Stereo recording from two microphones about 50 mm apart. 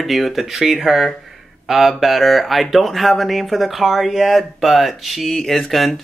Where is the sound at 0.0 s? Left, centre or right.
Centre.